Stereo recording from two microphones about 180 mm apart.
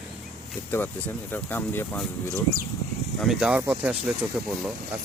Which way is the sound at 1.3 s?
10° left (ahead or behind).